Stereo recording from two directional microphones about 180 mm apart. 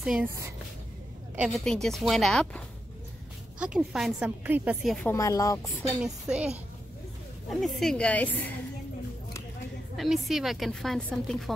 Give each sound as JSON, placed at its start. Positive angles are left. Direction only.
{"t": 0.0, "sound": "a woman's voice", "side_deg": -5}
{"t": 1.3, "sound": "a woman's voice", "side_deg": 0}
{"t": 5.0, "sound": "speech", "side_deg": 15}
{"t": 6.0, "sound": "a woman's voice", "side_deg": -5}
{"t": 9.9, "sound": "a woman's voice", "side_deg": 0}